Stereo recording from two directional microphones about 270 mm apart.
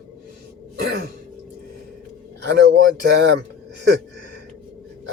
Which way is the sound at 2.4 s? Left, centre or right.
Right.